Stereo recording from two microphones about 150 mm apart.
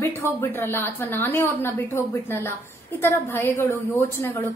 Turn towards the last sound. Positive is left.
turn(degrees=20)  # may be behind; listen again after turning